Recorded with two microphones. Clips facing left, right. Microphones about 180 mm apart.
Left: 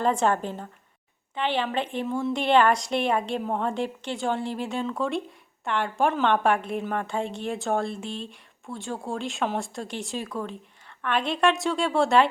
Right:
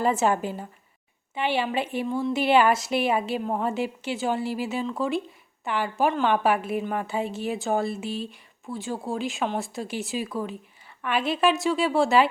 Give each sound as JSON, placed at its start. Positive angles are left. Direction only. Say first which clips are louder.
{"t": 0.0, "sound": "a woman's voice", "louder": "right 1 dB", "side_deg": -5}